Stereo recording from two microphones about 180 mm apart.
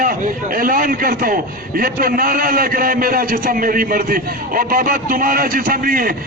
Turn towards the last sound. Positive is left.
turn(degrees=-50)  # may be behind; listen again after turning